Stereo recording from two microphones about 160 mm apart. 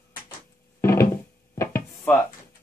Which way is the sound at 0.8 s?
15° left (ahead or behind).